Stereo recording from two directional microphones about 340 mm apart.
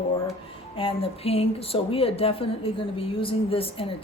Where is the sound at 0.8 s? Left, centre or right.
Centre.